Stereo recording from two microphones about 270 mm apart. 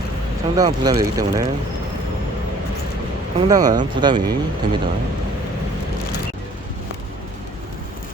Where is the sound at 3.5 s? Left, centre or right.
Centre.